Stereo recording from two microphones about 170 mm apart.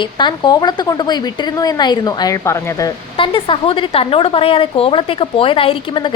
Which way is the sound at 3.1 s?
30° left (ahead or behind).